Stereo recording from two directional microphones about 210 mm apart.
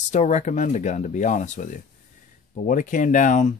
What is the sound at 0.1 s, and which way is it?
Speech, 35° left (ahead or behind).